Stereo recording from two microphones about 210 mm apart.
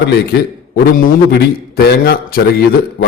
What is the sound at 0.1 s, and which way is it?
A man's voice, 50° left (ahead or behind).